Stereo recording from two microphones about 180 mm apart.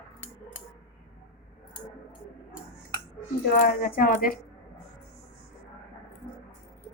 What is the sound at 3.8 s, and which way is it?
Speech, 55° left (ahead or behind).